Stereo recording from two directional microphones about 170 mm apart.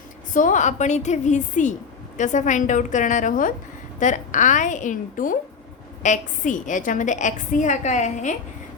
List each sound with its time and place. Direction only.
0.3 s a woman's voice: 50° left (ahead or behind)